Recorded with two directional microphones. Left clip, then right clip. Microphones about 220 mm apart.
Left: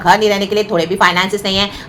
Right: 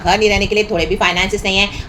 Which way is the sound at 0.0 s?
15° left (ahead or behind).